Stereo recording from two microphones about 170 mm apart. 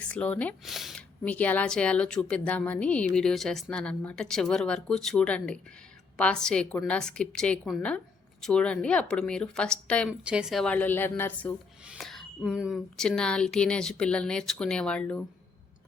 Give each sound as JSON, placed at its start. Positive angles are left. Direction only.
{"t": 0.1, "sound": "speech", "side_deg": 10}
{"t": 10.1, "sound": "a woman's voice", "side_deg": -5}